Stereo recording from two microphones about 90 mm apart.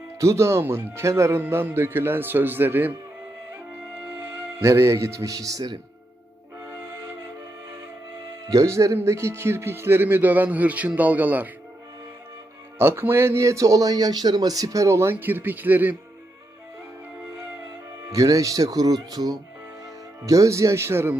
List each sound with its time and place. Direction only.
0.2 s speech: 30° right (ahead or behind)
4.2 s speech: 30° right (ahead or behind)
8.4 s speech: 35° right (ahead or behind); by 11.4 s 20° right (ahead or behind)
12.8 s speech: 25° right (ahead or behind)
15.1 s speech: 20° right (ahead or behind)
18.1 s speech: 40° right (ahead or behind)